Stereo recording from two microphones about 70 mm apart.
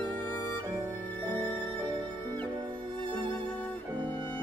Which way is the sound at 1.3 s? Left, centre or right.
Left.